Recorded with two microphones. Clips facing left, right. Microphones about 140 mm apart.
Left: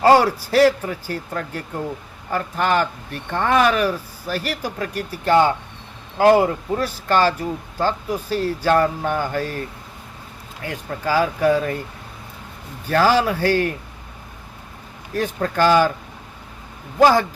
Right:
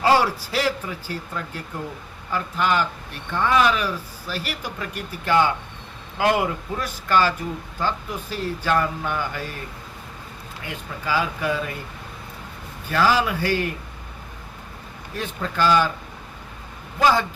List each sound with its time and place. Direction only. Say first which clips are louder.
0.0 s speech: left 5 dB; 45° left (ahead or behind)
11.0 s speech: left 6 dB; 40° left (ahead or behind)
12.9 s speech: left 4 dB; 40° left (ahead or behind)
15.1 s speech: left 6 dB; 45° left (ahead or behind)
17.0 s speech: left 5 dB; 40° left (ahead or behind)